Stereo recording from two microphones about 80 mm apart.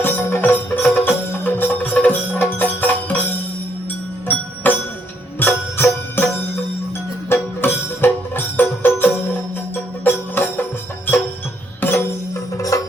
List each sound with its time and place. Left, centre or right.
0.0 s music: left
12.7 s music: left